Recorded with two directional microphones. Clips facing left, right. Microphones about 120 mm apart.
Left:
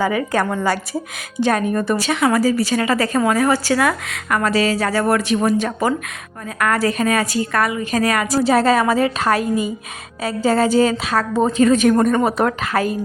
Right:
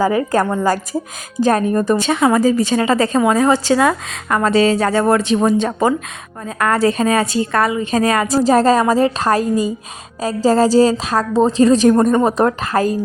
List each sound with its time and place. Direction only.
0.0 s a woman's voice: 40° right (ahead or behind)
12.5 s a woman's voice: 35° right (ahead or behind)